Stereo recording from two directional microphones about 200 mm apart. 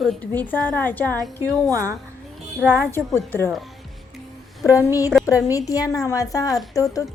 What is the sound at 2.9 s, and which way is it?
Speech, 10° left (ahead or behind).